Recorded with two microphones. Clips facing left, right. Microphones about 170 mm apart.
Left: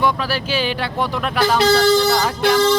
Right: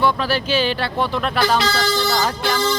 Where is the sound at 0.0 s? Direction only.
10° left (ahead or behind).